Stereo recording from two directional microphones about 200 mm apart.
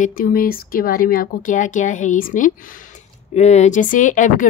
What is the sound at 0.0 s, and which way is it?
Speech, 45° left (ahead or behind).